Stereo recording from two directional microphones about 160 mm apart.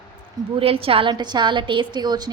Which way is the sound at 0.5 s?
35° right (ahead or behind).